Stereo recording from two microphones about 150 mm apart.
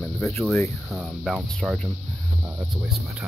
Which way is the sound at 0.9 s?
5° right (ahead or behind).